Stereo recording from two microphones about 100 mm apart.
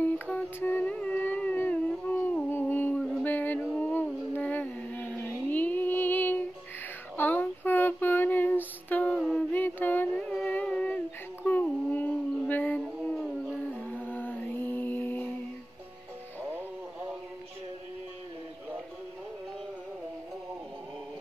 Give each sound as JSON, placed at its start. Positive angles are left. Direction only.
{"t": 0.0, "sound": "music", "side_deg": 15}
{"t": 2.5, "sound": "a sound", "side_deg": 20}
{"t": 3.0, "sound": "music", "side_deg": 0}
{"t": 3.3, "sound": "music", "side_deg": 20}
{"t": 3.8, "sound": "humming", "side_deg": 20}
{"t": 5.5, "sound": "music", "side_deg": 15}
{"t": 7.2, "sound": "child singing", "side_deg": 20}
{"t": 9.5, "sound": "music", "side_deg": 20}
{"t": 10.1, "sound": "music", "side_deg": 5}
{"t": 10.5, "sound": "a sound", "side_deg": 10}
{"t": 11.4, "sound": "dog", "side_deg": 15}
{"t": 13.1, "sound": "a sound", "side_deg": -5}
{"t": 13.7, "sound": "music", "side_deg": 15}